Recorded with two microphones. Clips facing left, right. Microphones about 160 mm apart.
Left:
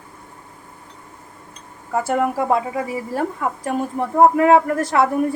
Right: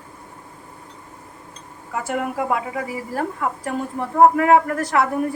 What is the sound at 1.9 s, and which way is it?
A woman's voice, 30° left (ahead or behind).